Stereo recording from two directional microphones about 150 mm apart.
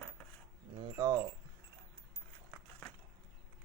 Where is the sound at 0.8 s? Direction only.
25° right (ahead or behind).